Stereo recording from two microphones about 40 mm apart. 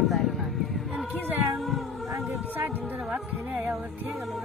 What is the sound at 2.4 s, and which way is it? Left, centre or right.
Speech, right.